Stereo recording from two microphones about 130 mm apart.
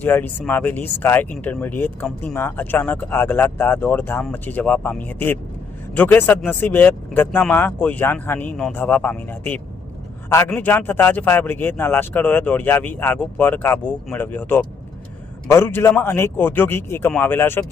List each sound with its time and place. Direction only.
0.0 s a man's voice: 15° left (ahead or behind)